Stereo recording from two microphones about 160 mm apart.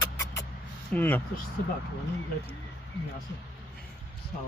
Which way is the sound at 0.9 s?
10° left (ahead or behind).